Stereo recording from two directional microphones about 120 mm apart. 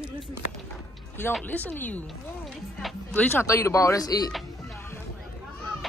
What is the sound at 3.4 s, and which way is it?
Speech, 25° left (ahead or behind).